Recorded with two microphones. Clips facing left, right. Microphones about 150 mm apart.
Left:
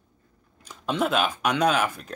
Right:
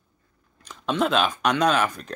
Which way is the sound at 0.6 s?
10° left (ahead or behind).